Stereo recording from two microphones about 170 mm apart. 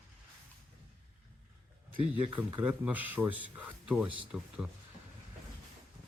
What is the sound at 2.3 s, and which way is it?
Speech, 30° right (ahead or behind).